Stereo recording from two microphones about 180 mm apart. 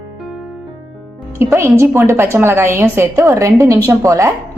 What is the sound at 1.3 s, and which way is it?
A woman's voice, 15° right (ahead or behind).